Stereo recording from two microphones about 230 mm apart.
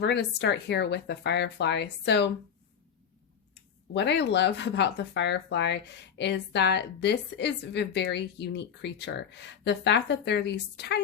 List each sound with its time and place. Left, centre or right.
0.0 s speech: left
3.5 s speech: left